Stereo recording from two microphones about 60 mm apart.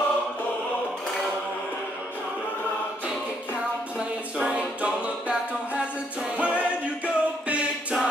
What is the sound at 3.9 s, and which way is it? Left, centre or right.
Music, centre.